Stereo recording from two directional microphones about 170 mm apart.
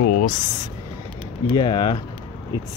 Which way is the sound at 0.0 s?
55° left (ahead or behind).